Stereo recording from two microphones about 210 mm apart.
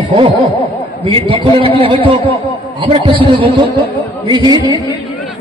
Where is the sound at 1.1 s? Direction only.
25° right (ahead or behind).